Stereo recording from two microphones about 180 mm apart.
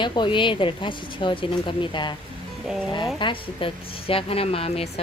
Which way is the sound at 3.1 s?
25° left (ahead or behind).